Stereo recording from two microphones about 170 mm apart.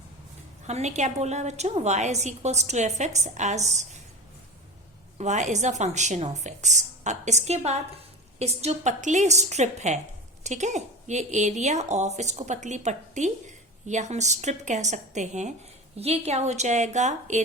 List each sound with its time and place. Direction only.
0.7 s a woman's voice: 40° right (ahead or behind)
5.1 s a woman's voice: 45° right (ahead or behind)